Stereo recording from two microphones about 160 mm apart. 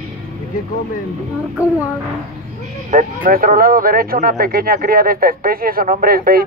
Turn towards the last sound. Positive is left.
turn(degrees=-65)  # may be behind; listen again after turning